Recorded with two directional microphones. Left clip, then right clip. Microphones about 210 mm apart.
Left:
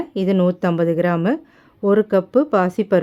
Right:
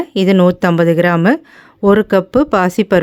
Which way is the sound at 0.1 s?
25° right (ahead or behind).